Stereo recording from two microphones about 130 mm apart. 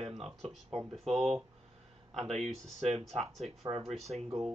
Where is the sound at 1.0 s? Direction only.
Centre (ahead or behind).